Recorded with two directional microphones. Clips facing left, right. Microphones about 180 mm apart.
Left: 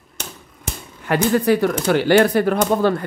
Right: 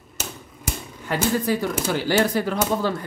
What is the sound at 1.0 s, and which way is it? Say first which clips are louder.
Speech: left 6 dB; 65° left (ahead or behind).